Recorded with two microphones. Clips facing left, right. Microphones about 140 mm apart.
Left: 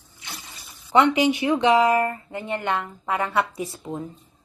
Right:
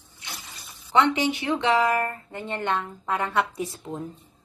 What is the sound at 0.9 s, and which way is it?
A woman's voice, 10° left (ahead or behind).